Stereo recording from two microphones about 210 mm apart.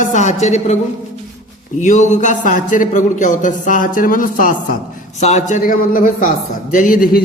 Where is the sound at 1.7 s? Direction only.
35° left (ahead or behind).